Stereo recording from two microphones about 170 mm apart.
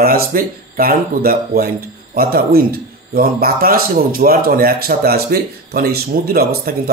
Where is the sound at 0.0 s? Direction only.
60° right (ahead or behind).